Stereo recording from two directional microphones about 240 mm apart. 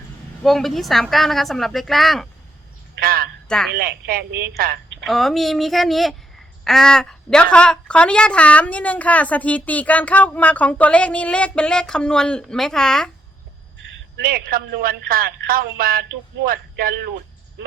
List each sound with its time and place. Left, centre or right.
0.4 s a woman's voice: centre
2.9 s a sound: right
3.8 s speech: right
5.0 s a woman's voice: centre
14.2 s speech: right